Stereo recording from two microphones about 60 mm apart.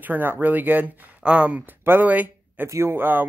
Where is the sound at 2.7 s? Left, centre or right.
Right.